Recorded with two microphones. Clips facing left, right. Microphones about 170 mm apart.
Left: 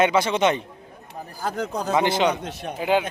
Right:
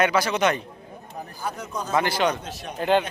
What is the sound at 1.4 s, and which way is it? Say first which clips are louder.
Speech: left 6 dB; 90° left.